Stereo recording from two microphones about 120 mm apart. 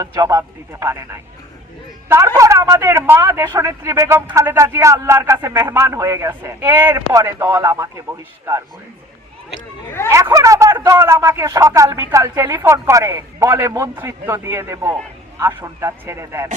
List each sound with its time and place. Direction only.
0.0 s speech: 30° right (ahead or behind)
10.1 s speech: 25° right (ahead or behind)